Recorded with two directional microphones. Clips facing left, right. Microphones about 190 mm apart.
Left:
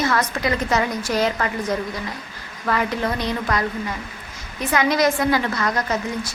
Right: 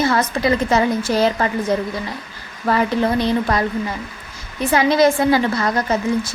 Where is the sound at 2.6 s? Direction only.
30° right (ahead or behind).